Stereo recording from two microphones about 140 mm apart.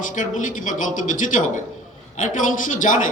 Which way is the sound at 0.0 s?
65° left (ahead or behind).